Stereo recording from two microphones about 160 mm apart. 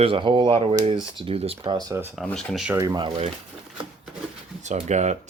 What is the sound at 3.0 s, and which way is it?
Speech, 35° right (ahead or behind).